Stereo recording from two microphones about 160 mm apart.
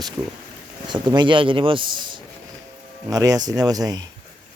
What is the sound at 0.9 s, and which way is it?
Speech, 30° right (ahead or behind).